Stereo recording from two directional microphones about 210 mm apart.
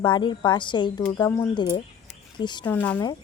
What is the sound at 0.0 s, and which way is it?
Speech, 20° left (ahead or behind).